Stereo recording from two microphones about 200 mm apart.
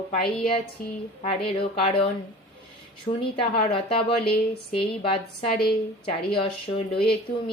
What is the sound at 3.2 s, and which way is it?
Speech, 25° left (ahead or behind).